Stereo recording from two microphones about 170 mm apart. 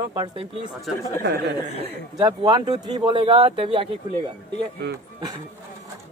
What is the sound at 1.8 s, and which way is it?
Speech, 35° right (ahead or behind).